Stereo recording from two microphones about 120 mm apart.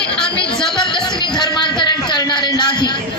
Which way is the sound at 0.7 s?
40° left (ahead or behind).